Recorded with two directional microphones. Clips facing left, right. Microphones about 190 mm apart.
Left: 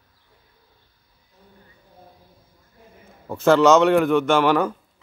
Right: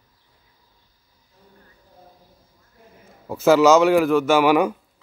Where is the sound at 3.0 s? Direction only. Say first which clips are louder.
Right 1 dB; 5° right (ahead or behind).